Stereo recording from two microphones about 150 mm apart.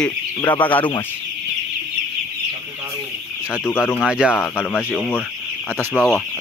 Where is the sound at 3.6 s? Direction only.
15° left (ahead or behind).